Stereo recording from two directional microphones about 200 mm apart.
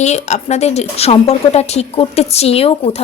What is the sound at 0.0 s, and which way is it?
Speech, 35° left (ahead or behind).